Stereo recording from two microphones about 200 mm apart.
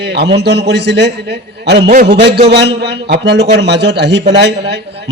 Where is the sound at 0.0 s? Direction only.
55° right (ahead or behind).